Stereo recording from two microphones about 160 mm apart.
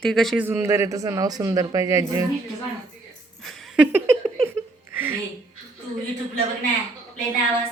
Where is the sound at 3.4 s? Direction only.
Centre (ahead or behind).